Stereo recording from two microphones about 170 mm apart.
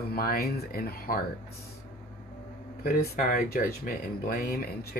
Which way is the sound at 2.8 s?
60° left (ahead or behind).